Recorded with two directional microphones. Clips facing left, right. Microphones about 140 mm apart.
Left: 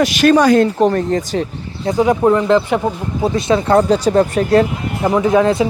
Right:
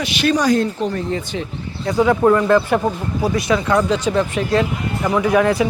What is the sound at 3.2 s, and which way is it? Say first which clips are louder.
Speech: left 3 dB; 25° left (ahead or behind).